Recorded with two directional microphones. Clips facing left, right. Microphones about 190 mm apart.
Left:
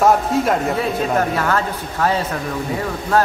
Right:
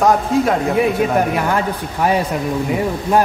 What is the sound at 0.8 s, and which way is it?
A man's voice, 15° right (ahead or behind).